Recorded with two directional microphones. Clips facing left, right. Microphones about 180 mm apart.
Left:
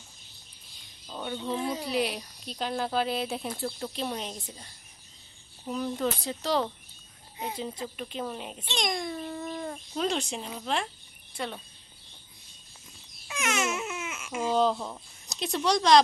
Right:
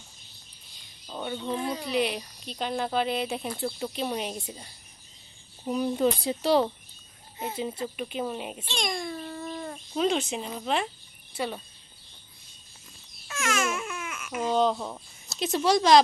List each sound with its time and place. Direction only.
1.0 s a sound: 5° right (ahead or behind)
1.5 s speech: 5° left (ahead or behind)
5.6 s speech: 15° right (ahead or behind)
8.6 s a child's voice: 20° left (ahead or behind)
9.4 s speech: centre (ahead or behind)
13.2 s babbling: 20° left (ahead or behind)
14.4 s speech: centre (ahead or behind)